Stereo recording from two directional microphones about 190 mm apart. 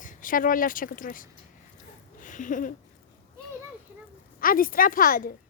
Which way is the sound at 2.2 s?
45° left (ahead or behind).